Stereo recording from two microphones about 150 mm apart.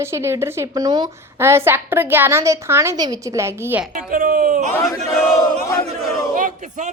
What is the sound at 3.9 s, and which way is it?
Speech, 65° right (ahead or behind).